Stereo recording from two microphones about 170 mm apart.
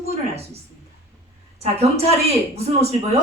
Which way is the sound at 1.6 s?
40° right (ahead or behind).